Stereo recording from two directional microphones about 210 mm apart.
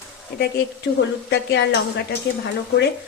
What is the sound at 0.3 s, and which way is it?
Speech, 45° left (ahead or behind).